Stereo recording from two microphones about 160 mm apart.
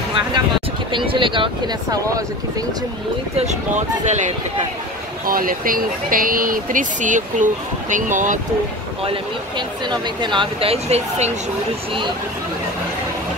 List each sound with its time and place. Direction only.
0.9 s speech: 30° right (ahead or behind)
3.3 s speech: 45° right (ahead or behind)
5.2 s speech: 65° right (ahead or behind)
9.8 s speech: 30° right (ahead or behind)